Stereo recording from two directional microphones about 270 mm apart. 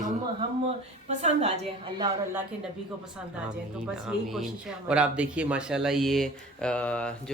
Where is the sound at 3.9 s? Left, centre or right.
Centre.